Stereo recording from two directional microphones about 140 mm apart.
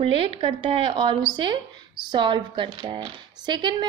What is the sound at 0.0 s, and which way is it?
A woman's voice, 40° right (ahead or behind).